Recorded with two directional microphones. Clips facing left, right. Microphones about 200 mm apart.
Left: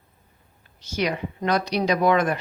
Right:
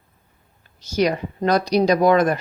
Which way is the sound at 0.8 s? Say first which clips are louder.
Right 6 dB; 40° right (ahead or behind).